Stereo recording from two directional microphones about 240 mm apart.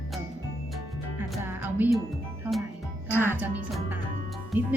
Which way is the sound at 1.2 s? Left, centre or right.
Centre.